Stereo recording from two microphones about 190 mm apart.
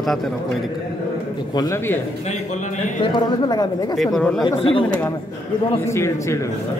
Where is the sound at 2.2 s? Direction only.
40° left (ahead or behind).